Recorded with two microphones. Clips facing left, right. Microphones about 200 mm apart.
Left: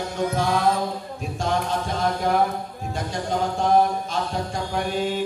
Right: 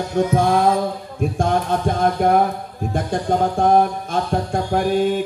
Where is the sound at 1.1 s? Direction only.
55° right (ahead or behind).